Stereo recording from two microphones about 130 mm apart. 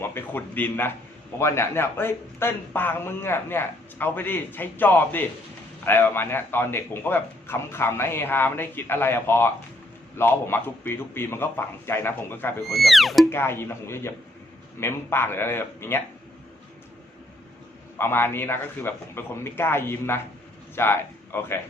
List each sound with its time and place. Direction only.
0.0 s a man's voice: 15° left (ahead or behind)
12.6 s speech: centre (ahead or behind)
13.3 s a man's voice: 20° left (ahead or behind)
17.9 s a man's voice: 15° left (ahead or behind)